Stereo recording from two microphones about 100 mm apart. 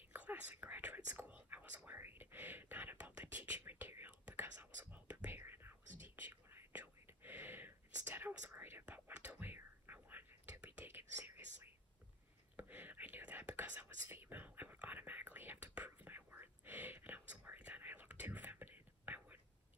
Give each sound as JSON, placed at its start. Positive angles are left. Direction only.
{"t": 0.1, "sound": "whispering", "side_deg": -15}